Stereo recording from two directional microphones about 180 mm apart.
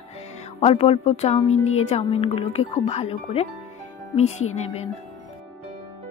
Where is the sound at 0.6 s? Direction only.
35° left (ahead or behind).